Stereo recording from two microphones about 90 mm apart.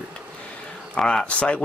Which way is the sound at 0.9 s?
10° left (ahead or behind).